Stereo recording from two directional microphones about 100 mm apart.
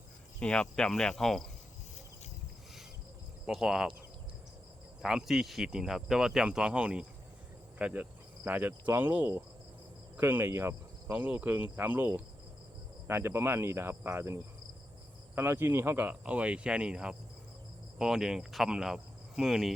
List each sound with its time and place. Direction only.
0.3 s speech: 10° left (ahead or behind)
3.4 s speech: 5° right (ahead or behind)
5.0 s speech: 5° right (ahead or behind)
7.8 s cricket: 10° right (ahead or behind)
8.4 s speech: 20° right (ahead or behind); by 19.7 s 5° right (ahead or behind)